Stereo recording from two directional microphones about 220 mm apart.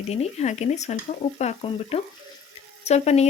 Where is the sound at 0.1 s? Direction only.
30° left (ahead or behind).